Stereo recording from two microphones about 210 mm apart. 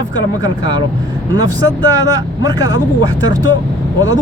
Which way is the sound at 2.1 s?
15° right (ahead or behind).